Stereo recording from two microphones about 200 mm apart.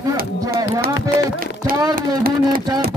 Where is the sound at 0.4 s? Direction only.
20° right (ahead or behind).